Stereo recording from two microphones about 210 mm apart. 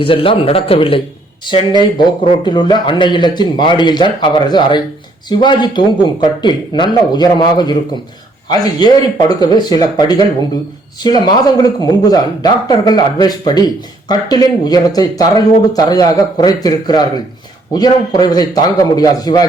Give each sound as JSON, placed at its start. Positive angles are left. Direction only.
{"t": 0.0, "sound": "a man's voice", "side_deg": 25}